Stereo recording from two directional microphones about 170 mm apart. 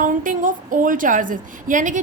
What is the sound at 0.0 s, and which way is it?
A woman's voice, 50° right (ahead or behind).